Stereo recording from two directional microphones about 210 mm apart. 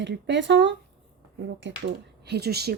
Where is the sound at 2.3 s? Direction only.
50° right (ahead or behind).